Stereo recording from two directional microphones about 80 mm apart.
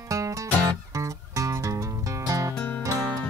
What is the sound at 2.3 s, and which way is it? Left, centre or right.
Music, right.